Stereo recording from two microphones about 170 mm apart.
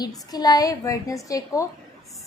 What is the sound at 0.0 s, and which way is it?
A woman's voice, 25° left (ahead or behind).